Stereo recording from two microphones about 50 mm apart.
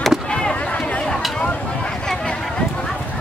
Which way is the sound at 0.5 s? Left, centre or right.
Left.